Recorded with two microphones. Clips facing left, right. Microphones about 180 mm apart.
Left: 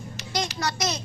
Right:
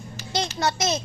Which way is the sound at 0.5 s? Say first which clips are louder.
Right 4 dB; 25° right (ahead or behind).